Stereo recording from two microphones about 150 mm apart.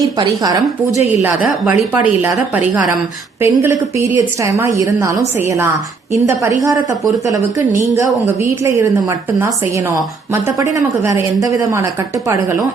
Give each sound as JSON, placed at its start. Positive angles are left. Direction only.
{"t": 0.2, "sound": "a woman's voice", "side_deg": -25}
{"t": 1.2, "sound": "a woman's voice", "side_deg": -10}
{"t": 3.4, "sound": "a woman's voice", "side_deg": -15}
{"t": 10.6, "sound": "a woman's voice", "side_deg": -20}